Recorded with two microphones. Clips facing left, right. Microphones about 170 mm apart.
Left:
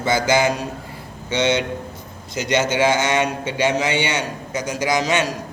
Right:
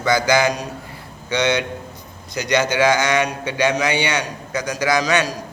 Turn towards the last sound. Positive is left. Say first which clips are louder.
# right 1 dB
turn(degrees=20)  # may be behind; listen again after turning